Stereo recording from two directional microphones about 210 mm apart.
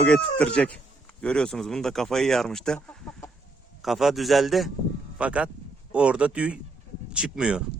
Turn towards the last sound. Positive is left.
turn(degrees=-5)  # may be behind; listen again after turning